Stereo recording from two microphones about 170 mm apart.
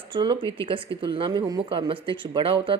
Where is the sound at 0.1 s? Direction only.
30° right (ahead or behind).